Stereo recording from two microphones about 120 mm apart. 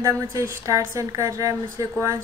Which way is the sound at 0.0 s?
25° right (ahead or behind).